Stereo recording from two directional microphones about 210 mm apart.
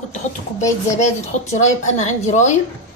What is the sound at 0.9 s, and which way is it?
Speech, 35° left (ahead or behind).